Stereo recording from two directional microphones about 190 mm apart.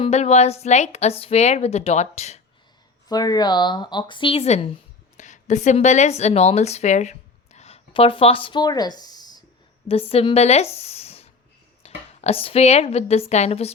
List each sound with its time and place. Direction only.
0.0 s a woman's voice: 35° left (ahead or behind)
3.1 s speech: 20° left (ahead or behind)
9.8 s a woman's voice: 30° left (ahead or behind)
10.8 s a sound: 35° left (ahead or behind)
11.8 s a woman's voice: 30° left (ahead or behind)